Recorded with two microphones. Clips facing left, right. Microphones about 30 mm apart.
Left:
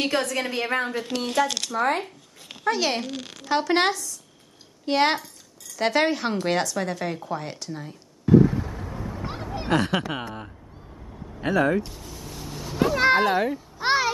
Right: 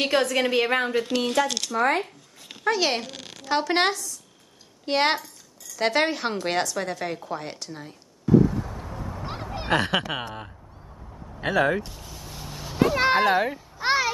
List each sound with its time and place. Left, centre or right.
0.0 s a woman's voice: centre
1.0 s a woman's voice: centre
8.3 s a sound: left
8.6 s vehicle: centre
9.2 s a sound: centre
10.2 s a woman's voice: centre
11.0 s vehicle: centre
11.4 s a woman's voice: centre
11.8 s vehicle: centre
13.7 s a child's voice: centre